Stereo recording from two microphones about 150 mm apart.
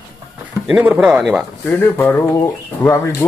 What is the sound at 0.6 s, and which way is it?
Speech, 5° right (ahead or behind).